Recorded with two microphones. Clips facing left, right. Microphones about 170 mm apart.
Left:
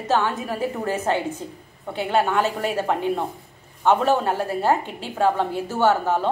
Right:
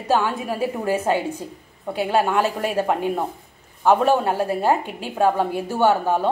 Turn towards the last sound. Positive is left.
turn(degrees=-10)  # may be behind; listen again after turning